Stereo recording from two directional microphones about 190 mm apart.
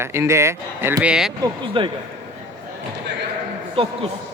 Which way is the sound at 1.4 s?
25° right (ahead or behind).